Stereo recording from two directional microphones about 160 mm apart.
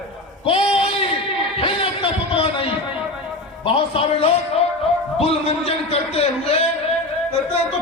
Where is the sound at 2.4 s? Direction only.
35° left (ahead or behind).